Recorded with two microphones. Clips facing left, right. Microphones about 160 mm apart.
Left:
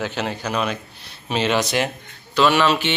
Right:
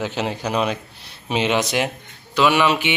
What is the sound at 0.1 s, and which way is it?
A man's voice, 20° right (ahead or behind).